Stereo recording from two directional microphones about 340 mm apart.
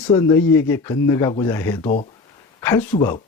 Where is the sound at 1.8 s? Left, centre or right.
Left.